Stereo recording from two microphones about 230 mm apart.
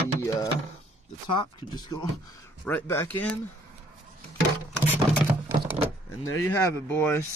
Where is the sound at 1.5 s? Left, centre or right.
Centre.